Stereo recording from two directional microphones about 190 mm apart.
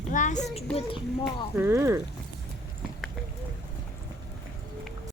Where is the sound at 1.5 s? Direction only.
15° right (ahead or behind).